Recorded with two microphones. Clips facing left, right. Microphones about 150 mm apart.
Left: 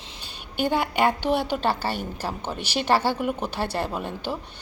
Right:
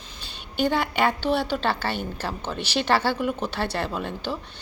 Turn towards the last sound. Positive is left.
turn(degrees=10)  # may be behind; listen again after turning